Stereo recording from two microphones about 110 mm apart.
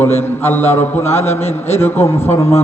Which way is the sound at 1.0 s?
75° left (ahead or behind).